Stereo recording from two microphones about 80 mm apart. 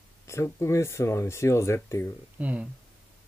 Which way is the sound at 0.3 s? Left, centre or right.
Left.